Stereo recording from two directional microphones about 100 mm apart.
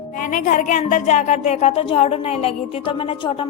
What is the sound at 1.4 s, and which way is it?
A woman's voice, 90° left.